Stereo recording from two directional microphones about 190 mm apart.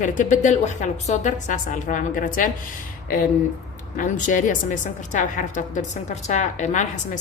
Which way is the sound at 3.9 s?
45° left (ahead or behind).